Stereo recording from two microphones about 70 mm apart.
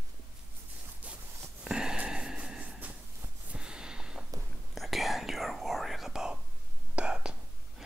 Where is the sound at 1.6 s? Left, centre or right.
Centre.